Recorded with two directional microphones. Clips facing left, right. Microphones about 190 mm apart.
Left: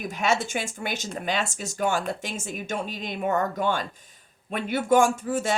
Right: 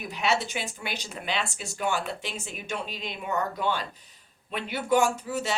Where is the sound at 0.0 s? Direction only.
45° left (ahead or behind).